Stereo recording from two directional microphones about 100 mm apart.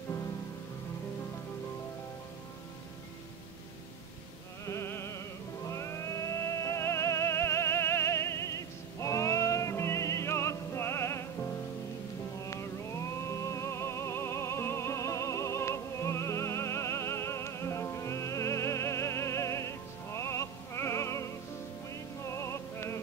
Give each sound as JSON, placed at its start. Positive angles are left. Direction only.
{"t": 4.6, "sound": "music", "side_deg": 25}
{"t": 12.4, "sound": "music", "side_deg": 30}